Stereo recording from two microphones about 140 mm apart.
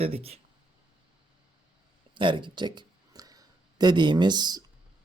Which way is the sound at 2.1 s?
35° right (ahead or behind).